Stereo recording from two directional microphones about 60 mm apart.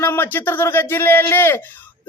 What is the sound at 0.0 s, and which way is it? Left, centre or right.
A man's voice, left.